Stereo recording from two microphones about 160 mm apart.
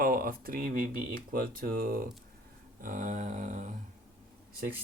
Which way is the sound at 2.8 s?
50° right (ahead or behind).